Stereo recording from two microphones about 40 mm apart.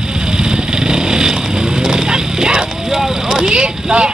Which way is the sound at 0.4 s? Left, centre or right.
Centre.